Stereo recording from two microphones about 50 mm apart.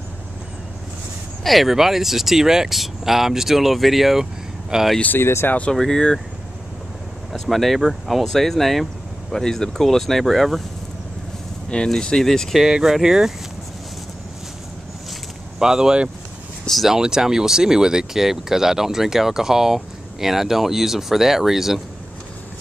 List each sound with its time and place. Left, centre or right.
1.4 s speech: centre
5.2 s speech: left
5.7 s speech: centre
7.3 s speech: centre
11.9 s speech: centre
12.5 s speech: centre
15.6 s speech: centre
16.6 s speech: centre
16.9 s speech: centre